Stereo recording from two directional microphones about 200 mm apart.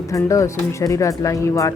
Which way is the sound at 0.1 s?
15° left (ahead or behind).